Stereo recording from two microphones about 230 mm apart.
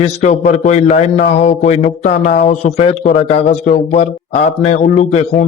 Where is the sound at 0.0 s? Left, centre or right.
Left.